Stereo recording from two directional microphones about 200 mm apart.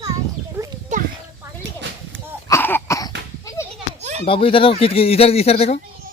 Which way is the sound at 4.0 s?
35° right (ahead or behind).